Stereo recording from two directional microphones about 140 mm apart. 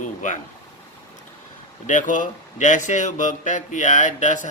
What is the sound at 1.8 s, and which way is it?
A man's voice, 65° left (ahead or behind).